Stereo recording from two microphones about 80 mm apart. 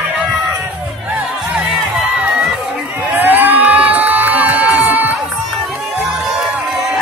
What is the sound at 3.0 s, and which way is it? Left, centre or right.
Crowd, right.